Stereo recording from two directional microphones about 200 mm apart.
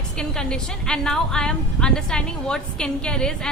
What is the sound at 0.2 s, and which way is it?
A woman's voice, 5° left (ahead or behind).